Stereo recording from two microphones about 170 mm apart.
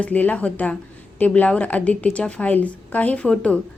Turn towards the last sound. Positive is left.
turn(degrees=5)  # may be behind; listen again after turning